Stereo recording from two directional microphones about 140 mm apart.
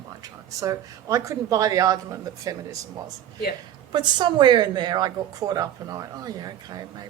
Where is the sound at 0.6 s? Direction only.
25° right (ahead or behind).